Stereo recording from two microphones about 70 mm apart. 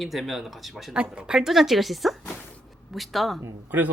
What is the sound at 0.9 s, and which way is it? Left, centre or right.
Speech, centre.